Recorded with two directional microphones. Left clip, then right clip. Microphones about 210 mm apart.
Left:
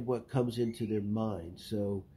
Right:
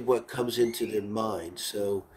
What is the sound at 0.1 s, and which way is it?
Speech, 5° right (ahead or behind).